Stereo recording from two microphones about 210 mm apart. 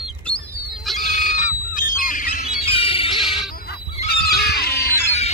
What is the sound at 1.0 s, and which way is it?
Squawk, 35° left (ahead or behind).